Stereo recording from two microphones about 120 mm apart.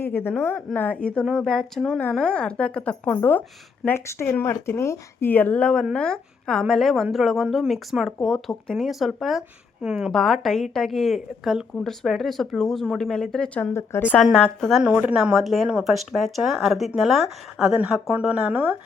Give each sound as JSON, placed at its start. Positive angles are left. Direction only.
{"t": 0.0, "sound": "a woman's voice", "side_deg": 20}
{"t": 14.2, "sound": "speech", "side_deg": 5}